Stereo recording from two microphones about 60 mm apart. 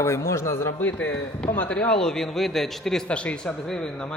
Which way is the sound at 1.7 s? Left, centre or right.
Centre.